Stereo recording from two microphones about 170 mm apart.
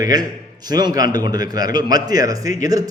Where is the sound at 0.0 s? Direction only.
25° right (ahead or behind).